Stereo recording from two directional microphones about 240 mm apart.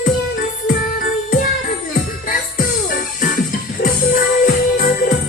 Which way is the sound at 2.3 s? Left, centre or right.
Left.